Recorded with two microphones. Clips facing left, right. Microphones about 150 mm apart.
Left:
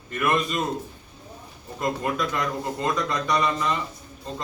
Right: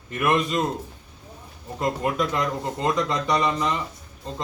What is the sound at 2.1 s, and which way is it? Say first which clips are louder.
A man's voice: right 2 dB; 20° right (ahead or behind).